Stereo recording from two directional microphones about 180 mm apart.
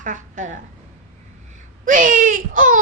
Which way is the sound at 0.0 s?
45° right (ahead or behind).